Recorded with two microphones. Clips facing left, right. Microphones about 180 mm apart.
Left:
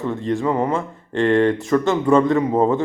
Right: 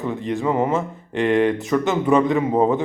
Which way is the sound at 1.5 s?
Centre (ahead or behind).